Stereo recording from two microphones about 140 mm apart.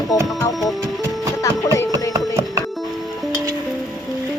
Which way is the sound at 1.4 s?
20° left (ahead or behind).